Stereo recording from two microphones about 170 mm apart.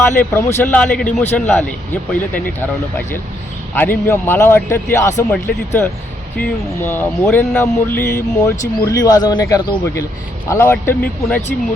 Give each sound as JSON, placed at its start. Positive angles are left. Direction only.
{"t": 0.2, "sound": "speech", "side_deg": 10}
{"t": 3.8, "sound": "speech", "side_deg": 10}